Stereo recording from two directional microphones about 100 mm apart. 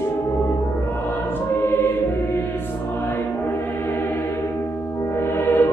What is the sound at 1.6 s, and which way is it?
Music, 25° left (ahead or behind).